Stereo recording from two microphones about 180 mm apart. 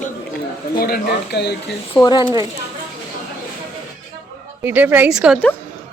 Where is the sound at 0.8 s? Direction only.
60° left (ahead or behind).